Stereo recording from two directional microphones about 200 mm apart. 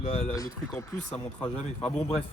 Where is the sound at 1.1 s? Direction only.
5° left (ahead or behind).